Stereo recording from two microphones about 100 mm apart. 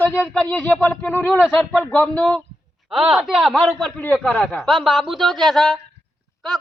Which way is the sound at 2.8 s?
10° right (ahead or behind).